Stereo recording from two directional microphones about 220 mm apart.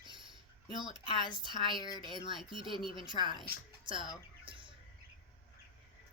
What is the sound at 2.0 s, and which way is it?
Speech, 20° right (ahead or behind).